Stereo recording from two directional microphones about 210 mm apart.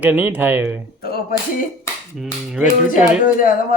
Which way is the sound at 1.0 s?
45° left (ahead or behind).